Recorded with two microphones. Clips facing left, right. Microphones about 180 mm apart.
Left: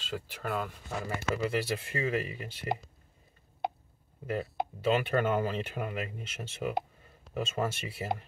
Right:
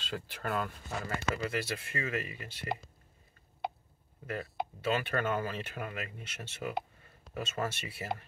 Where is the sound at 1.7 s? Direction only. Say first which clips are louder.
Left 5 dB; 35° left (ahead or behind).